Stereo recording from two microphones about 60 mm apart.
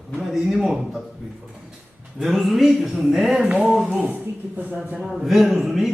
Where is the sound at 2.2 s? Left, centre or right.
Centre.